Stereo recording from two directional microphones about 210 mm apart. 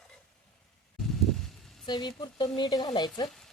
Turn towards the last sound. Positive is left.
turn(degrees=20)  # may be behind; listen again after turning